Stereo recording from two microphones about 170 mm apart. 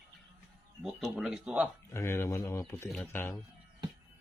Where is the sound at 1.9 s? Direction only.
15° left (ahead or behind).